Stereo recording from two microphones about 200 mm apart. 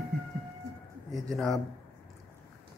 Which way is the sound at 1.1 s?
Centre (ahead or behind).